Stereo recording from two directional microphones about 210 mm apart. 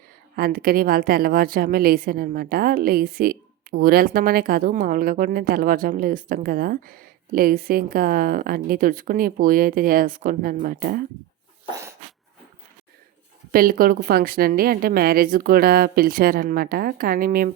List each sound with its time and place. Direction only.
0.3 s a woman's voice: 45° right (ahead or behind)
11.7 s dog: 15° right (ahead or behind)
13.5 s a woman's voice: 45° right (ahead or behind)